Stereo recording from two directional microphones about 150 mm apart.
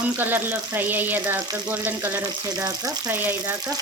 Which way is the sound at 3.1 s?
15° right (ahead or behind).